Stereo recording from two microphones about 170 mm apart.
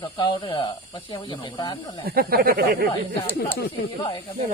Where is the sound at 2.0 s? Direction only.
60° right (ahead or behind).